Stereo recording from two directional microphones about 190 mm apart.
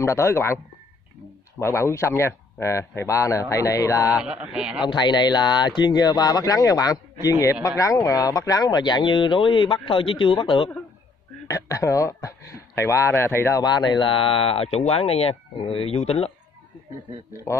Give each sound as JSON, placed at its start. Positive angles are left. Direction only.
{"t": 0.0, "sound": "speech", "side_deg": 15}
{"t": 1.6, "sound": "speech", "side_deg": 15}
{"t": 4.1, "sound": "a man's voice", "side_deg": -5}
{"t": 4.8, "sound": "speech", "side_deg": 25}
{"t": 17.5, "sound": "speech", "side_deg": 15}